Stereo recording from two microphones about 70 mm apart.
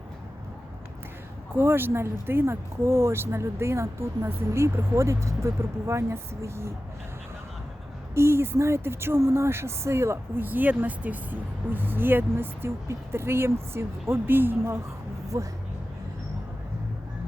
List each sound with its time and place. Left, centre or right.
1.5 s speech: right
8.1 s speech: right
10.4 s speech: right
15.3 s speech: right